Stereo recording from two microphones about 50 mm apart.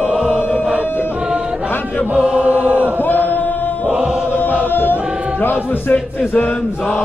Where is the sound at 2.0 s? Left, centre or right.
Right.